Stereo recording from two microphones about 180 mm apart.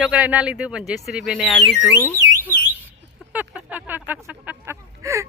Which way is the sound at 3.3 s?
10° right (ahead or behind).